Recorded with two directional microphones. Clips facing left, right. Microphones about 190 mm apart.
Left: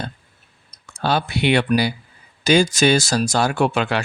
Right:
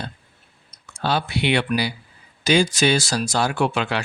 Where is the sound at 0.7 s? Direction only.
45° left (ahead or behind).